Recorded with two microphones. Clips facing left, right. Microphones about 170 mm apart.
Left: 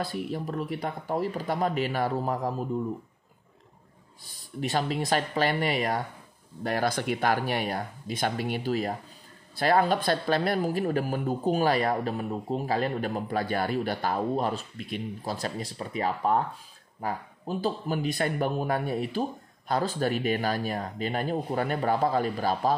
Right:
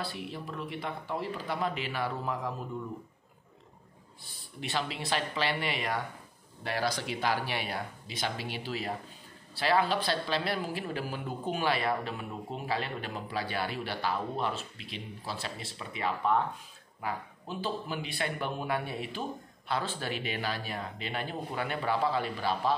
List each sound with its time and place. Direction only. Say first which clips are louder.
0.0 s speech: left 7 dB; 45° left (ahead or behind)
4.3 s speech: left 7 dB; 40° left (ahead or behind)